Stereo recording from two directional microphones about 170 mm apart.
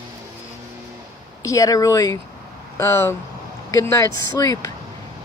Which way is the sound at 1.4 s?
20° left (ahead or behind).